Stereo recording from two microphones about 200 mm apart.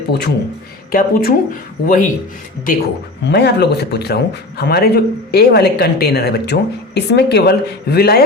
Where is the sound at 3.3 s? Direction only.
55° left (ahead or behind).